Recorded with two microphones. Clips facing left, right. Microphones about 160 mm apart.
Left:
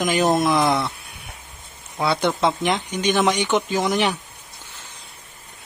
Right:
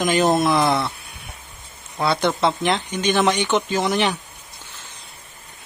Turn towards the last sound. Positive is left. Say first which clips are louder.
# even
turn(degrees=10)  # may be behind; listen again after turning